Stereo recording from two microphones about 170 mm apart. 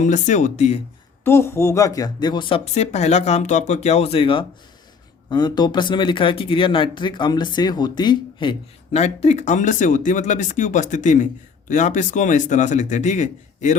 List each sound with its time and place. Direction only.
0.0 s a man's voice: 45° left (ahead or behind)
1.2 s a woman's voice: 15° left (ahead or behind); by 13.7 s 45° left (ahead or behind)